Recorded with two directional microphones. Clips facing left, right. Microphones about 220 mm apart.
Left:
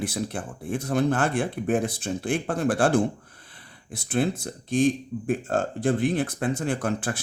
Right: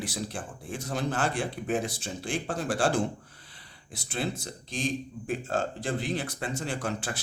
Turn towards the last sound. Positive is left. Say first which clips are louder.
# left 6 dB
turn(degrees=55)  # may be behind; listen again after turning